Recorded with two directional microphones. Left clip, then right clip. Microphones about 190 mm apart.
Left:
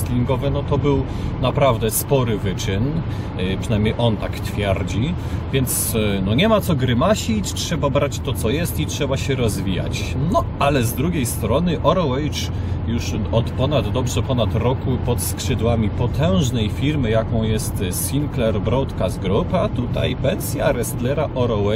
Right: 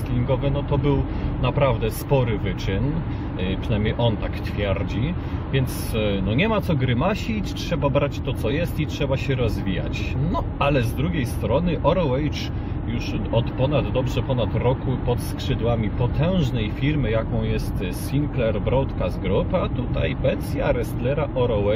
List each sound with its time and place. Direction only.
0.3 s speech: 15° left (ahead or behind)